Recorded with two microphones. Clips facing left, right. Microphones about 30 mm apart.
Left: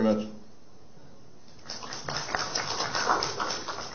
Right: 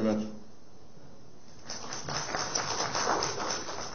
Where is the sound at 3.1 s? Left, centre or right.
Centre.